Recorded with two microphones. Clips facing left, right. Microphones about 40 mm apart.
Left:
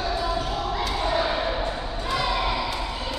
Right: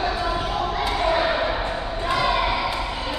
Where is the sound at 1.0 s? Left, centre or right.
Right.